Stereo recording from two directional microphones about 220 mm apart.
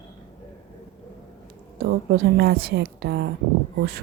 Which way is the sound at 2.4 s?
45° right (ahead or behind).